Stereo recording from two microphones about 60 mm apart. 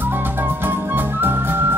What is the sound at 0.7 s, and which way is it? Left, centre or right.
Music, right.